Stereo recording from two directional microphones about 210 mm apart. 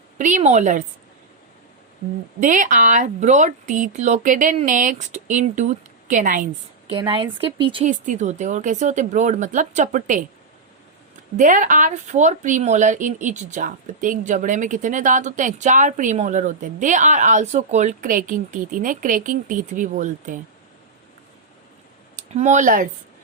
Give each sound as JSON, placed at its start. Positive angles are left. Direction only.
{"t": 0.2, "sound": "speech", "side_deg": -35}
{"t": 2.4, "sound": "speech", "side_deg": -35}
{"t": 6.8, "sound": "speech", "side_deg": -25}
{"t": 7.9, "sound": "speech", "side_deg": -35}
{"t": 11.3, "sound": "speech", "side_deg": -35}
{"t": 22.4, "sound": "speech", "side_deg": -35}